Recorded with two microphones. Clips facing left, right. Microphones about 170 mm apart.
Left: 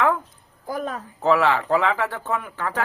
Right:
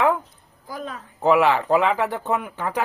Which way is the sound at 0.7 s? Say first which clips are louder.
Left 5 dB; 45° left (ahead or behind).